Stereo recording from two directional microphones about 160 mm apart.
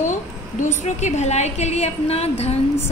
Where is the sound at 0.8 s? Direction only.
45° left (ahead or behind).